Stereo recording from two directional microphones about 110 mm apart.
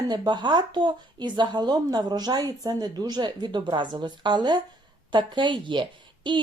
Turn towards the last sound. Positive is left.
turn(degrees=-45)  # may be behind; listen again after turning